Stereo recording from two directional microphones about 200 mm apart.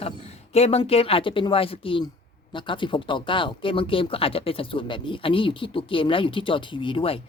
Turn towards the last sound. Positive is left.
turn(degrees=25)  # may be behind; listen again after turning